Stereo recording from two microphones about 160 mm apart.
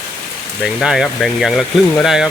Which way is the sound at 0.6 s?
Centre (ahead or behind).